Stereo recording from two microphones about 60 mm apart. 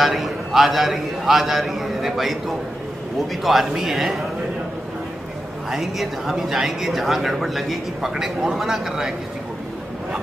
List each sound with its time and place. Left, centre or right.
0.0 s speech: centre
5.7 s speech: centre